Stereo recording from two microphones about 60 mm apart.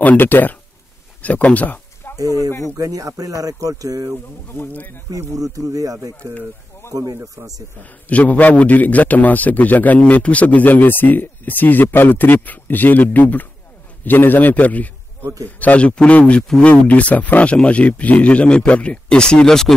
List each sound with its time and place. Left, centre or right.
0.0 s a man's voice: left
2.0 s a sound: left
2.7 s speech: right
4.7 s speech: left
5.1 s speech: right
7.8 s a man's voice: left; by 19.7 s centre